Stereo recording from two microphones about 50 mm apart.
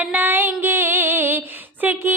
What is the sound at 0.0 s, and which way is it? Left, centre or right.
Music, right.